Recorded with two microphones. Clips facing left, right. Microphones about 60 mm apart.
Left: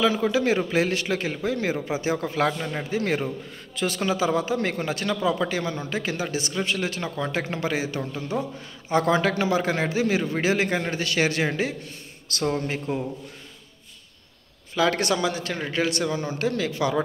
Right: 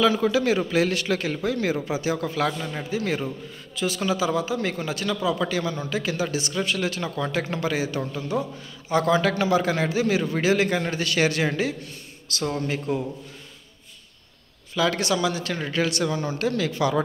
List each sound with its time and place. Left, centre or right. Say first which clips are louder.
0.0 s a man's voice: right 1 dB; centre
8.8 s a man's voice: even; left
12.3 s speech: left 1 dB; left
12.6 s a man's voice: right 2 dB; left
14.8 s speech: even; left
15.5 s a man's voice: even; centre